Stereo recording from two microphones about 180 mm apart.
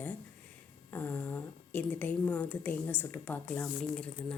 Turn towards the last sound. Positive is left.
turn(degrees=5)  # may be behind; listen again after turning